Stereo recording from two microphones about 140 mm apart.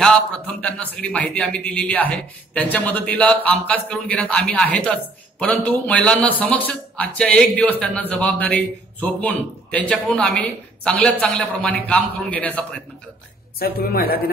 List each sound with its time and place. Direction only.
0.6 s a man's voice: 10° left (ahead or behind)
13.6 s speech: 90° left